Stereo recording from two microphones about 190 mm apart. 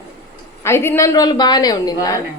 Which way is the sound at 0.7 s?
15° left (ahead or behind).